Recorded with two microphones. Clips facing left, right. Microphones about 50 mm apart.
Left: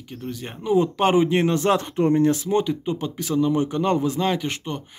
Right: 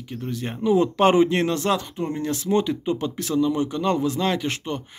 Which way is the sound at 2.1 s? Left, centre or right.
Left.